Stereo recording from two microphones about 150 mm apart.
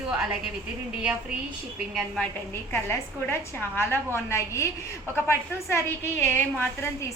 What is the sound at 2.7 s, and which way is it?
A woman's voice, 15° left (ahead or behind).